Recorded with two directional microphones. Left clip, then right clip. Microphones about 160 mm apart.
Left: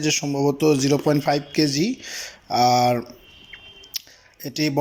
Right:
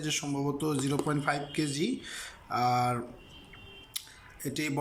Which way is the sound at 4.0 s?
30° left (ahead or behind).